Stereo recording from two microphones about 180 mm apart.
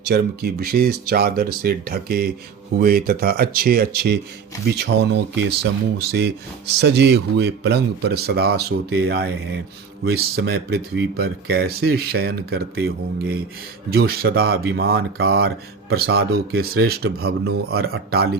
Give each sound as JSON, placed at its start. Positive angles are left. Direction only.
{"t": 0.0, "sound": "speech", "side_deg": -60}
{"t": 4.8, "sound": "speech", "side_deg": -75}